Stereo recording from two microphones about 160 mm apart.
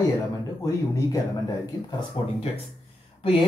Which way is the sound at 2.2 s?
35° left (ahead or behind).